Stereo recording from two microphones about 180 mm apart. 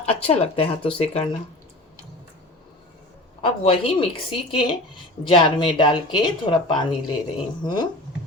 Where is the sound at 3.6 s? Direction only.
30° left (ahead or behind).